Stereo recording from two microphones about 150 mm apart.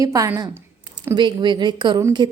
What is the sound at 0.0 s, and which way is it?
A woman's voice, 25° right (ahead or behind).